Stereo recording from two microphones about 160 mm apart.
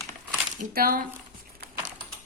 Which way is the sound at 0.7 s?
65° right (ahead or behind).